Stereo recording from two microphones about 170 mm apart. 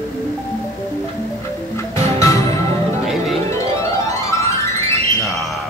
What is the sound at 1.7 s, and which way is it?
Music, 15° left (ahead or behind).